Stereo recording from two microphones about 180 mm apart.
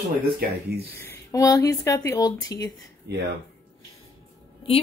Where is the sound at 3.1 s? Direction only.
70° right (ahead or behind).